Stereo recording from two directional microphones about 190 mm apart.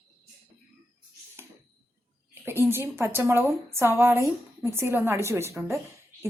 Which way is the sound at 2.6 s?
10° right (ahead or behind).